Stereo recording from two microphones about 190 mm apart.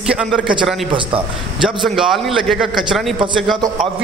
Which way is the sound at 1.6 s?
Centre (ahead or behind).